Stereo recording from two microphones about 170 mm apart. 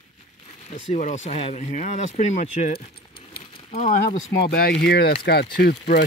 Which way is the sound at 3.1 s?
30° left (ahead or behind).